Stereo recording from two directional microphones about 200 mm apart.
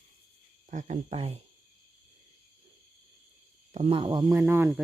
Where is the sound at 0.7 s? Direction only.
40° right (ahead or behind).